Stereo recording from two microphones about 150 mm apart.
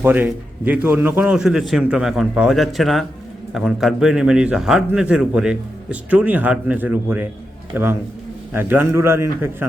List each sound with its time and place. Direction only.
0.0 s a man's voice: 10° right (ahead or behind)